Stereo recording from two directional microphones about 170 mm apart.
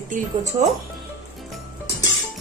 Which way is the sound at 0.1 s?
45° right (ahead or behind).